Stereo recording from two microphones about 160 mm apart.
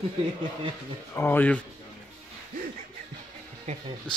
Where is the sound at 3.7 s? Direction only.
45° right (ahead or behind).